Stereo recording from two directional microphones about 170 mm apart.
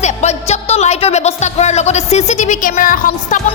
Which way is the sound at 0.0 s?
40° left (ahead or behind).